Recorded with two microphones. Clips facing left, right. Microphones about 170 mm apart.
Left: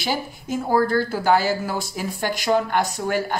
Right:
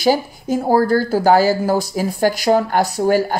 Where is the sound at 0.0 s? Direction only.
40° right (ahead or behind).